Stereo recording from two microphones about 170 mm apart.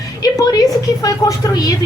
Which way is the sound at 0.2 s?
20° left (ahead or behind).